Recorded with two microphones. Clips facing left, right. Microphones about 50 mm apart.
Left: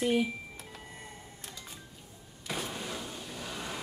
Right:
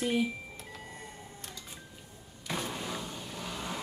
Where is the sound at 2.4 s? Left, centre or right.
Centre.